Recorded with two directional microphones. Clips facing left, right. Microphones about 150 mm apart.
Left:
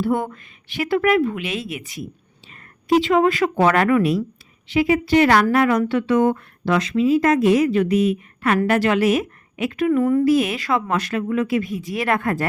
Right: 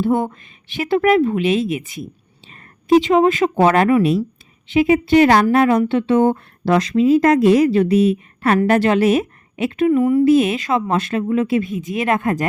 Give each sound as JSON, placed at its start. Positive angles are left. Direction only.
{"t": 0.0, "sound": "speech", "side_deg": -25}
{"t": 3.0, "sound": "speech", "side_deg": -20}
{"t": 10.0, "sound": "a woman's voice", "side_deg": -10}
{"t": 10.2, "sound": "speech", "side_deg": -25}